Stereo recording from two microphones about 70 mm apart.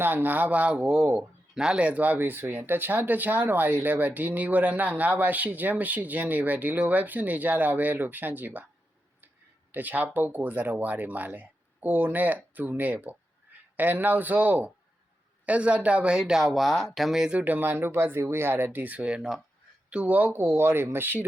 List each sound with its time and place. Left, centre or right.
0.0 s speech: right
1.5 s speech: centre
9.7 s speech: right; by 17.4 s centre
17.4 s speech: right
20.4 s speech: right